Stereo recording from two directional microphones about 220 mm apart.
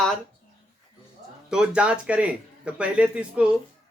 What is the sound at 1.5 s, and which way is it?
A man's voice, 5° right (ahead or behind).